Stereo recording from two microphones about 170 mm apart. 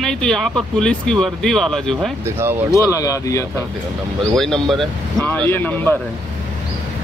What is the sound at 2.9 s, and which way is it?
Speech, 20° left (ahead or behind).